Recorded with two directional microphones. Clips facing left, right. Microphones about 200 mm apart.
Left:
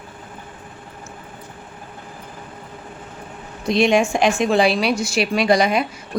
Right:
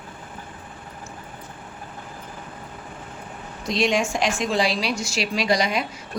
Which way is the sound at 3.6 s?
55° left (ahead or behind).